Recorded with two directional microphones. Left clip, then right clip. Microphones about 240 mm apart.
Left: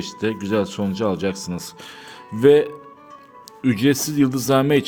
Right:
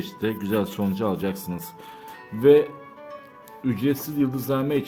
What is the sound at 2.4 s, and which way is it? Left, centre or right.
A man's voice, left.